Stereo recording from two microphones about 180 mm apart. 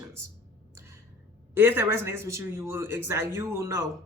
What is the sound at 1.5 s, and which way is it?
A man's voice, 10° right (ahead or behind).